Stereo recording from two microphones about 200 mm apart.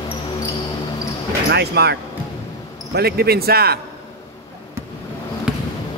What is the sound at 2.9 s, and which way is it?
Speech, 50° right (ahead or behind).